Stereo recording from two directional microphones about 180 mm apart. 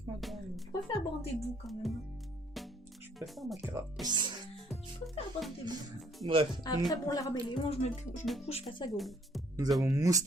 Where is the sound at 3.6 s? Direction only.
15° right (ahead or behind).